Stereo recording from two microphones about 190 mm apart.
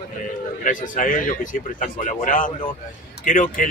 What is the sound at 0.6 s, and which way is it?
Speech, 45° left (ahead or behind).